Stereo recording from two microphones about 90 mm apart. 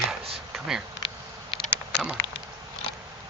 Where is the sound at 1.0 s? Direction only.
80° left.